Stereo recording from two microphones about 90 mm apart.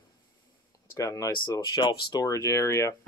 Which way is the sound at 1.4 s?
50° left (ahead or behind).